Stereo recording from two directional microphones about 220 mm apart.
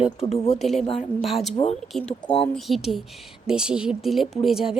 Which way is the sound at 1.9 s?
Centre (ahead or behind).